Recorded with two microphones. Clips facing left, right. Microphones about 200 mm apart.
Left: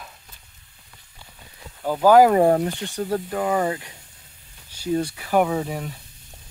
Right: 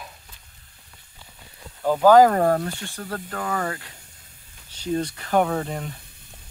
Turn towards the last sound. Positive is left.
turn(degrees=5)  # may be behind; listen again after turning